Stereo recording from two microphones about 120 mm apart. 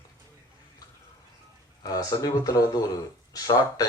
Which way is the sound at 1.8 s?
30° left (ahead or behind).